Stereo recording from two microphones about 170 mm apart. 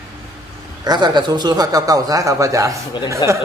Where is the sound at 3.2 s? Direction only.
25° left (ahead or behind).